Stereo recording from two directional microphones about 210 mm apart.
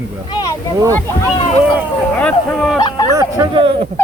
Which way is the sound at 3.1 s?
15° right (ahead or behind).